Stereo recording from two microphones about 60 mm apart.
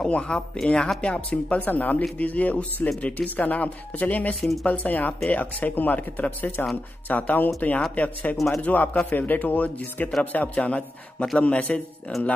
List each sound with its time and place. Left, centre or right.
0.0 s speech: centre